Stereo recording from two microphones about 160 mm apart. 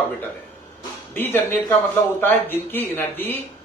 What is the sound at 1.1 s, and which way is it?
Speech, 15° left (ahead or behind).